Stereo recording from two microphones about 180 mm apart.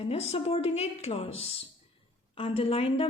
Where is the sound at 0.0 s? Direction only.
35° left (ahead or behind).